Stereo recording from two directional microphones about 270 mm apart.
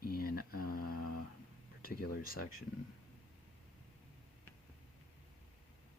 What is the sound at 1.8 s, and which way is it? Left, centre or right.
Speech, left.